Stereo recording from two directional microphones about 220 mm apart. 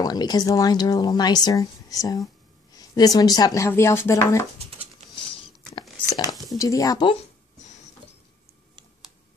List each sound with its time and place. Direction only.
0.0 s speech: 20° left (ahead or behind)
5.8 s a sound: 15° left (ahead or behind)
6.5 s speech: 15° left (ahead or behind)